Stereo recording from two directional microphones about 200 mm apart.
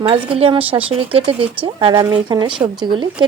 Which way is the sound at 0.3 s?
25° right (ahead or behind).